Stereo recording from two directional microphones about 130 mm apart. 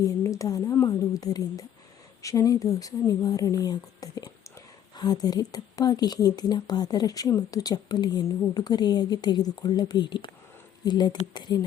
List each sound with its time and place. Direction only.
0.0 s a woman's voice: 25° left (ahead or behind)